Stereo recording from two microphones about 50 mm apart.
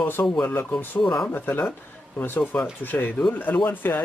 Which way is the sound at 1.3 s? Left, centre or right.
Left.